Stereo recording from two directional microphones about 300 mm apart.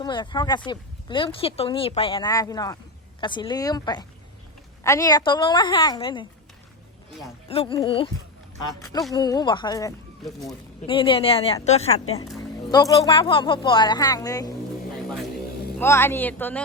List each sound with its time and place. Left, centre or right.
0.0 s speech: centre
7.4 s speech: centre
9.1 s speech: centre
15.8 s speech: centre